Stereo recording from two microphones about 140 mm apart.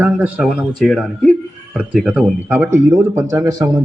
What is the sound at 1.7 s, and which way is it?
Speech, 5° right (ahead or behind).